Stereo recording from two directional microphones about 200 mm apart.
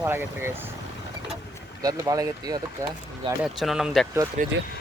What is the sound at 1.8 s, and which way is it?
Speech, 20° right (ahead or behind).